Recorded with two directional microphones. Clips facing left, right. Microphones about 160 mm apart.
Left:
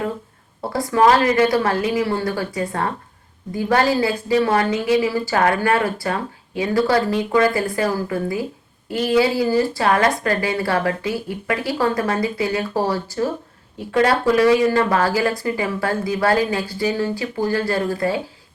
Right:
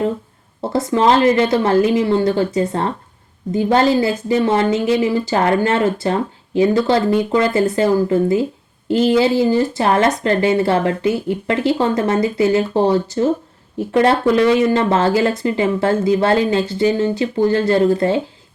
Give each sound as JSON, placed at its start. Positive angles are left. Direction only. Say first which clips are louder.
{"t": 0.6, "sound": "a woman's voice", "louder": "right 1 dB", "side_deg": -20}